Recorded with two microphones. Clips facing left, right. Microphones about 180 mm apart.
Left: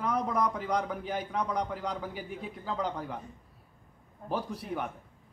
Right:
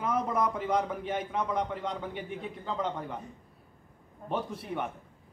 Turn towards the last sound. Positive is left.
turn(degrees=0)  # may be behind; listen again after turning